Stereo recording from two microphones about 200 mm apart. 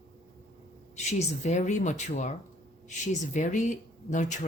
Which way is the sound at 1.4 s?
35° left (ahead or behind).